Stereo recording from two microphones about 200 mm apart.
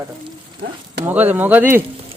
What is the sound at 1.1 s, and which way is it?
Speech, 10° right (ahead or behind).